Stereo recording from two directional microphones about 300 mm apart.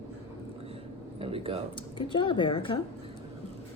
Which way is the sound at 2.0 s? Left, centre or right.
Centre.